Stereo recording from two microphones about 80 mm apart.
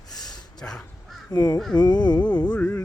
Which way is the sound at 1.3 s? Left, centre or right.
Left.